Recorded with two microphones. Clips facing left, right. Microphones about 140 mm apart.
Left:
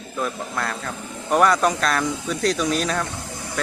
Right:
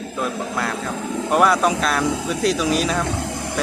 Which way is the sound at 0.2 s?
Centre (ahead or behind).